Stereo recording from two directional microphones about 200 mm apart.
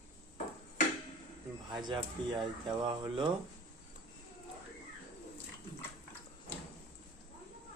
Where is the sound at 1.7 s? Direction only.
20° right (ahead or behind).